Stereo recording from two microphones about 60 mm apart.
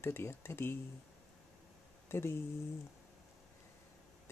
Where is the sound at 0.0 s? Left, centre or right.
Left.